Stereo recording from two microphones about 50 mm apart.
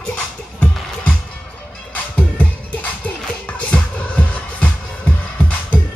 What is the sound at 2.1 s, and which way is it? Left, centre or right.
Music, left.